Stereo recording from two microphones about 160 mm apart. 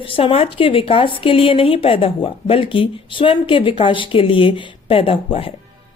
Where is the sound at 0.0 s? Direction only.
35° left (ahead or behind).